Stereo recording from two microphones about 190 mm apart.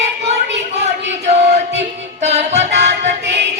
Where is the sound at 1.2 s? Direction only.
35° right (ahead or behind).